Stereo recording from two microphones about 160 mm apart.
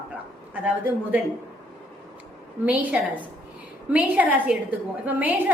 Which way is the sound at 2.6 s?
10° right (ahead or behind).